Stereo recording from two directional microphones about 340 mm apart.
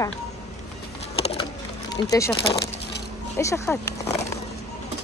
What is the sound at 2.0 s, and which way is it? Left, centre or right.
Speech, centre.